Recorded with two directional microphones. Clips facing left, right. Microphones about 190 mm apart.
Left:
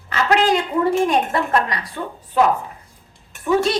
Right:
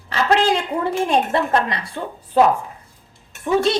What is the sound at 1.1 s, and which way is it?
Speech, 25° right (ahead or behind).